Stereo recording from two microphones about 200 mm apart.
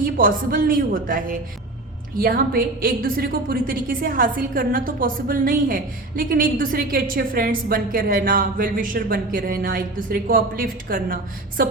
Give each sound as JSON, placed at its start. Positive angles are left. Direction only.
{"t": 0.0, "sound": "a woman's voice", "side_deg": -45}